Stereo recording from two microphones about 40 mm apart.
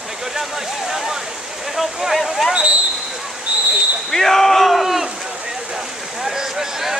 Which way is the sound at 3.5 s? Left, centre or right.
Right.